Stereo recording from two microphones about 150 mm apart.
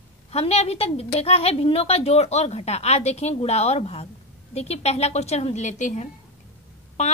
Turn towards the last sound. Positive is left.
turn(degrees=50)  # may be behind; listen again after turning